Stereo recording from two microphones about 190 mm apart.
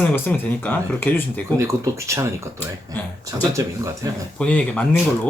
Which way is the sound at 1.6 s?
15° right (ahead or behind).